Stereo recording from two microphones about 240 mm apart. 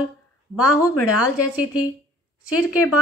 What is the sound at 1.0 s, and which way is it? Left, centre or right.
Speech, left.